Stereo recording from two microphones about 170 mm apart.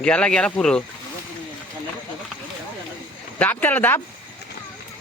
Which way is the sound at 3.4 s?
10° left (ahead or behind).